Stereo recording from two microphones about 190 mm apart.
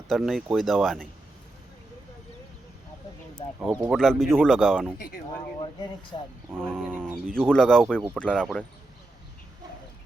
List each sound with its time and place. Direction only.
0.1 s speech: centre (ahead or behind)
3.6 s speech: 5° right (ahead or behind)
4.9 s speech: 50° left (ahead or behind)
6.1 s speech: 25° left (ahead or behind)
6.6 s speech: 5° left (ahead or behind)